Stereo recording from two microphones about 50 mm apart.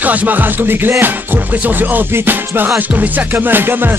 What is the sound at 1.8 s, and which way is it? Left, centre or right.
Music, right.